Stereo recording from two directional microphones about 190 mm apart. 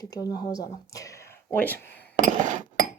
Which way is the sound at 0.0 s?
20° left (ahead or behind).